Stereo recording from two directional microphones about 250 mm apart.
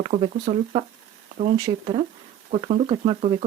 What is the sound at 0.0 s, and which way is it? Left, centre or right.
Speech, right.